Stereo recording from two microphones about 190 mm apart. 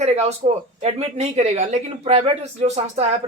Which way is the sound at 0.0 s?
35° right (ahead or behind).